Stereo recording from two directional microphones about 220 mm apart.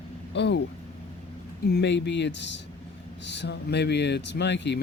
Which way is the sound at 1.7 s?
50° left (ahead or behind).